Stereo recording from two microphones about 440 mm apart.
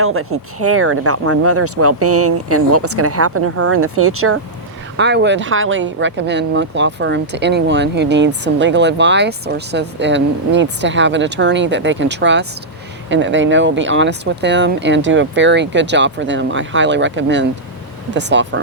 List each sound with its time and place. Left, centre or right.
0.0 s speech: right